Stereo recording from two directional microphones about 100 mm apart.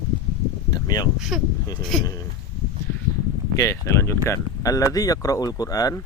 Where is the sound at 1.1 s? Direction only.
Centre (ahead or behind).